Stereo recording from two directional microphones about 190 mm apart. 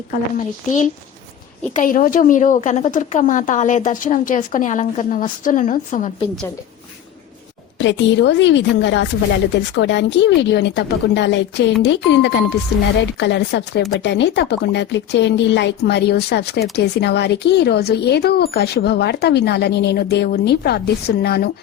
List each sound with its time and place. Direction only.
0.1 s a woman's voice: 40° left (ahead or behind)
7.8 s speech: 70° left (ahead or behind)